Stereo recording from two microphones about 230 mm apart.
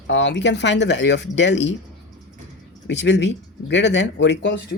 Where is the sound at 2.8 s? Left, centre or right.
Left.